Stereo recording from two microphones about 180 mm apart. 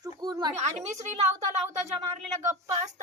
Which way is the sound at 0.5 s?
40° right (ahead or behind).